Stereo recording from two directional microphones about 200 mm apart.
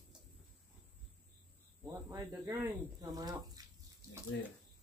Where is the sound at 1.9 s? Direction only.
15° right (ahead or behind).